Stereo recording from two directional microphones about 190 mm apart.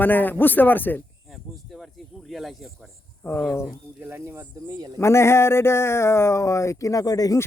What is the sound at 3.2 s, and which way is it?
Speech, 10° left (ahead or behind).